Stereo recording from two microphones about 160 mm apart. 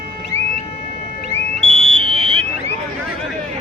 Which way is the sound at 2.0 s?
35° right (ahead or behind).